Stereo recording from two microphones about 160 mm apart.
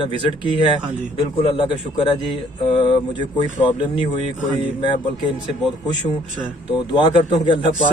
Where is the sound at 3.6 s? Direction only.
35° left (ahead or behind).